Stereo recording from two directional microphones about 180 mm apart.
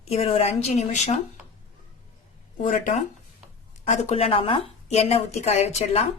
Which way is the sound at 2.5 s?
45° left (ahead or behind).